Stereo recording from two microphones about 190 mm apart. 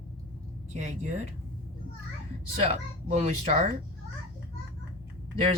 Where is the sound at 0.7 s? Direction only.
35° right (ahead or behind).